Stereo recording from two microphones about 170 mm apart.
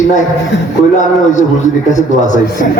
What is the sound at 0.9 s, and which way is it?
A man's voice, 45° left (ahead or behind).